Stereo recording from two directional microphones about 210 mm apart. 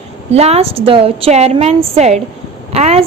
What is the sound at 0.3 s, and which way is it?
A woman's voice, 30° right (ahead or behind).